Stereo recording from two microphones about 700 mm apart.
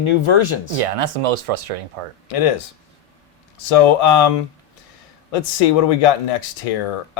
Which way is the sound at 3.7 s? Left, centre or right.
Left.